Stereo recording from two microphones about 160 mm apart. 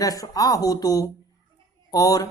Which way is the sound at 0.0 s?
20° left (ahead or behind).